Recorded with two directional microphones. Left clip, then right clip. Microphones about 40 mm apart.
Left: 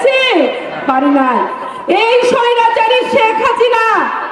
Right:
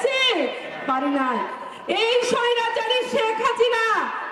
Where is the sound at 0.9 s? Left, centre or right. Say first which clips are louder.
Left 12 dB; centre.